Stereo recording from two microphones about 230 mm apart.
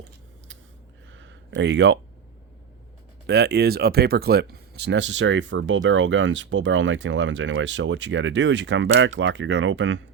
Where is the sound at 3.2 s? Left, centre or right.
Right.